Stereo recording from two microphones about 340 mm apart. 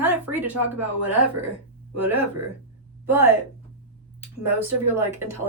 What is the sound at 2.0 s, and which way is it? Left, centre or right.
Speech, centre.